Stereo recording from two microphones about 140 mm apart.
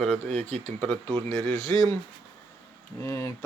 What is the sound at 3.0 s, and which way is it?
Speech, 15° left (ahead or behind).